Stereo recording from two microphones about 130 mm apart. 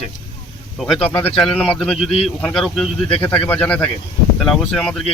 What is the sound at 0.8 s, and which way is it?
A man's voice, 5° left (ahead or behind).